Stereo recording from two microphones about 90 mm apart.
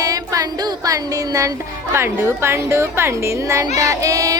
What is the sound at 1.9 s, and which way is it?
Music, 30° right (ahead or behind).